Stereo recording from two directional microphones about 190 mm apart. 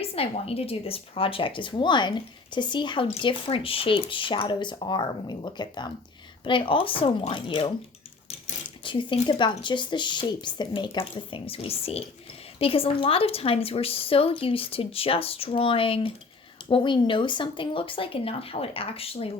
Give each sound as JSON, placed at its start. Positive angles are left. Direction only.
{"t": 0.0, "sound": "speech", "side_deg": 30}
{"t": 8.8, "sound": "speech", "side_deg": 25}